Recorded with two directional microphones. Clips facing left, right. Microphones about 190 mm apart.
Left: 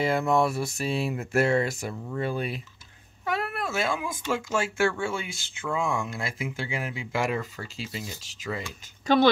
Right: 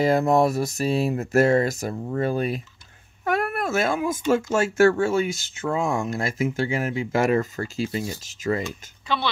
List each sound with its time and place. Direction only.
0.0 s speech: 40° right (ahead or behind)
9.0 s speech: 45° left (ahead or behind)